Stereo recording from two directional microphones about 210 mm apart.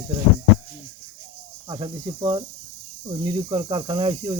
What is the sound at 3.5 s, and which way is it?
Cricket, 20° right (ahead or behind).